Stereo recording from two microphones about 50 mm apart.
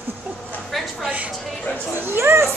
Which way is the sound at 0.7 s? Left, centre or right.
Centre.